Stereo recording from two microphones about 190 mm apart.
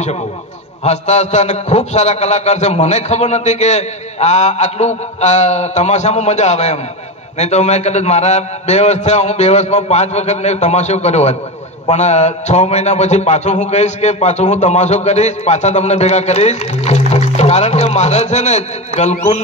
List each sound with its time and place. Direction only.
0.8 s a man's voice: 35° left (ahead or behind)